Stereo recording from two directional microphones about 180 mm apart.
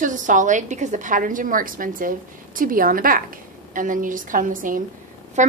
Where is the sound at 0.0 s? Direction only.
45° right (ahead or behind).